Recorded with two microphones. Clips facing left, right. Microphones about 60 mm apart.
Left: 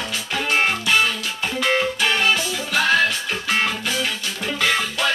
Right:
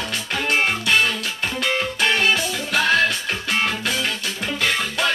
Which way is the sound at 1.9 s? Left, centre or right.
Centre.